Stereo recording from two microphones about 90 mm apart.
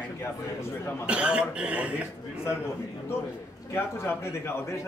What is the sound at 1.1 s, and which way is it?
Speech, 10° right (ahead or behind).